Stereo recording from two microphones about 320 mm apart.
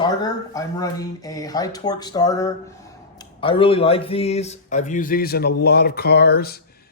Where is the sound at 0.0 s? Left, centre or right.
Centre.